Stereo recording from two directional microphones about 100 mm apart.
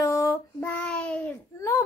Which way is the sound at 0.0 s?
35° left (ahead or behind).